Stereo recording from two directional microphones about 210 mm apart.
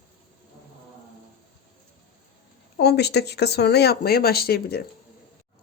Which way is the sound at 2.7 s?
50° left (ahead or behind).